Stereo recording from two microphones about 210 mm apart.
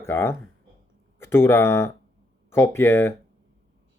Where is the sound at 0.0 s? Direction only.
10° left (ahead or behind).